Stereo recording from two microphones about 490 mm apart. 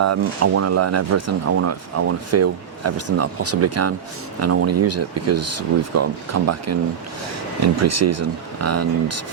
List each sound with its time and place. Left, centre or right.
0.0 s speech: right